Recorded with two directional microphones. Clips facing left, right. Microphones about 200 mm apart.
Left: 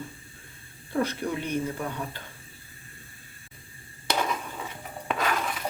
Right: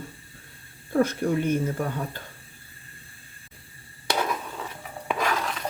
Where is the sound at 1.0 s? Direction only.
50° right (ahead or behind).